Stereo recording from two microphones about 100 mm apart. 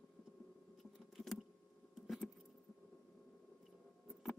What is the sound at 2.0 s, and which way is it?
Keys jangling, centre (ahead or behind).